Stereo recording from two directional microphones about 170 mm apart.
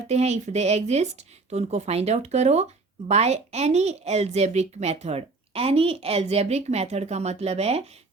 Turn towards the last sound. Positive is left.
turn(degrees=-40)  # may be behind; listen again after turning